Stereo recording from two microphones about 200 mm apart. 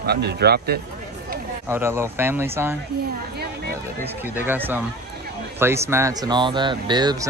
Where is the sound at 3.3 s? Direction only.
55° right (ahead or behind).